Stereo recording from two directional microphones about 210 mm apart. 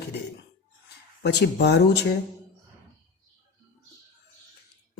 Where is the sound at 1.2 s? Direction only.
55° left (ahead or behind).